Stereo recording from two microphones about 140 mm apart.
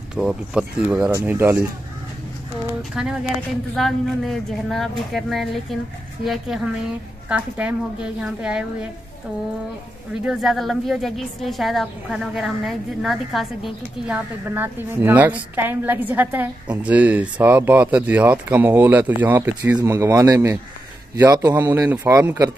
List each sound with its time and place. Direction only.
0.1 s a woman's voice: 5° right (ahead or behind)
2.9 s a woman's voice: 5° right (ahead or behind)
10.2 s a woman's voice: 5° right (ahead or behind); by 21.8 s 25° right (ahead or behind)
21.8 s a woman's voice: 15° right (ahead or behind)